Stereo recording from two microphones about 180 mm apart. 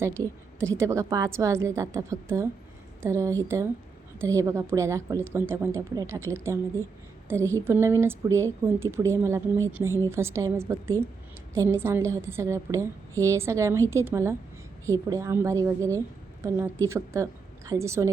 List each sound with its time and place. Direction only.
0.0 s a woman's voice: 15° right (ahead or behind)